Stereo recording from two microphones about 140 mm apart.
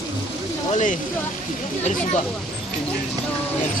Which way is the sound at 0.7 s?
60° left (ahead or behind).